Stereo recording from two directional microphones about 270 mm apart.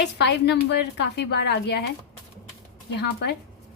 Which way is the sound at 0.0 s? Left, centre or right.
Left.